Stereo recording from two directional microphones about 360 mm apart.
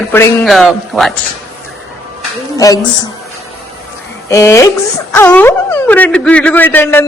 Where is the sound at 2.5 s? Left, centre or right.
Centre.